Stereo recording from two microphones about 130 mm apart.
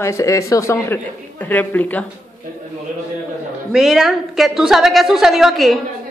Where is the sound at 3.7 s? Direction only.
5° right (ahead or behind).